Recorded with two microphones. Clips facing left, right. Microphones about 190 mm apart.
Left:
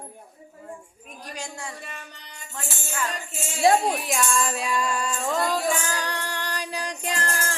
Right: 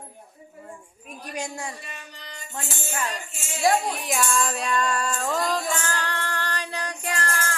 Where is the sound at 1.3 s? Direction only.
20° right (ahead or behind).